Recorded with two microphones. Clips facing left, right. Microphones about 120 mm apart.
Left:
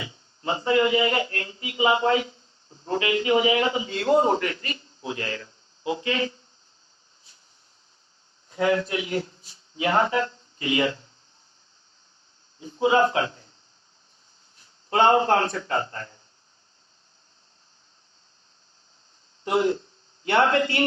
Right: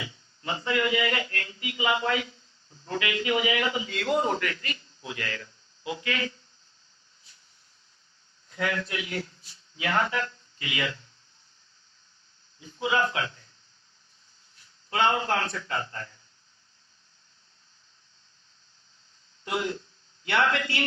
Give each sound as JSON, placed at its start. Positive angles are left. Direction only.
{"t": 0.0, "sound": "speech", "side_deg": 30}
{"t": 8.4, "sound": "speech", "side_deg": 30}
{"t": 12.5, "sound": "a man's voice", "side_deg": 30}
{"t": 14.6, "sound": "a man's voice", "side_deg": 30}
{"t": 19.5, "sound": "a man's voice", "side_deg": 30}